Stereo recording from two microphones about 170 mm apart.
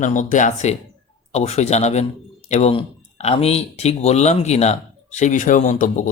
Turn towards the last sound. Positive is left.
turn(degrees=45)  # may be behind; listen again after turning